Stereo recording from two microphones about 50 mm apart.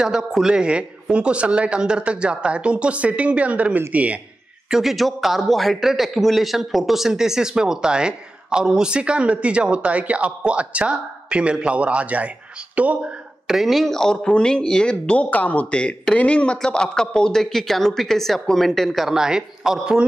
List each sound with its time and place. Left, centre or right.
0.0 s a man's voice: centre
0.6 s speech: right
4.6 s a man's voice: centre; by 13.0 s right
13.5 s speech: centre; by 15.2 s left
15.2 s speech: left
15.7 s speech: left
16.6 s speech: centre
19.0 s a man's voice: centre